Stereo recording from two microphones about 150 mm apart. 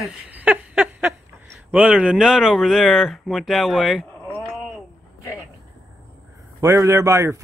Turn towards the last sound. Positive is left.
turn(degrees=-20)  # may be behind; listen again after turning